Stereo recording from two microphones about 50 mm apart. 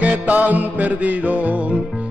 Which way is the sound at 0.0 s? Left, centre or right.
Right.